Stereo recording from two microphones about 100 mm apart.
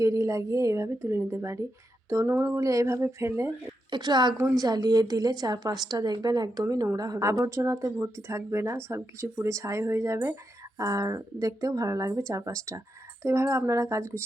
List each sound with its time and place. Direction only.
0.0 s a woman's voice: 30° right (ahead or behind)
3.9 s a woman's voice: 45° right (ahead or behind); by 14.3 s 30° right (ahead or behind)